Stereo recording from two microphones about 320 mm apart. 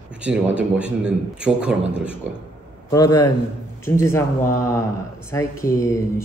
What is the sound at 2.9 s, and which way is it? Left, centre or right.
Speech, centre.